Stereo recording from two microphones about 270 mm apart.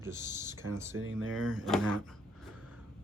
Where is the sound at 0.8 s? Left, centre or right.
Right.